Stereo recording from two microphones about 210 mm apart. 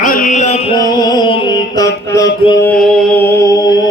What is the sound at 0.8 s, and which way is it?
Music, 20° left (ahead or behind).